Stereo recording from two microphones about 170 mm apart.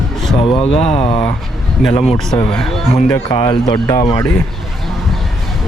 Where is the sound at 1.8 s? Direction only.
Centre (ahead or behind).